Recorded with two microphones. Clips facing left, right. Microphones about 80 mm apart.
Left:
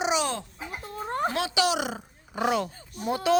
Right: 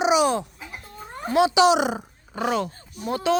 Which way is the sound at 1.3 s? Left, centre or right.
Centre.